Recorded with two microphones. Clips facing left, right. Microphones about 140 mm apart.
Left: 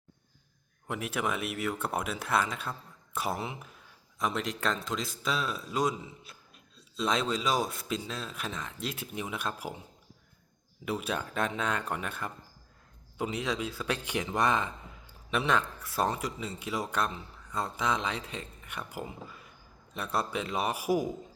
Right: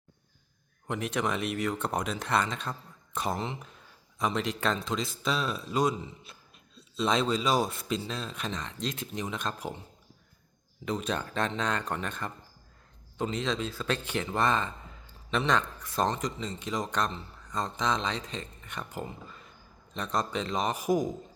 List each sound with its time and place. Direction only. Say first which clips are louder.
0.9 s speech: right 2 dB; 5° left (ahead or behind)
10.8 s speech: right 1 dB; 10° left (ahead or behind)